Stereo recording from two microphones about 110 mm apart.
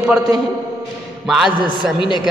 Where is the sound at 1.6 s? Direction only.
45° left (ahead or behind).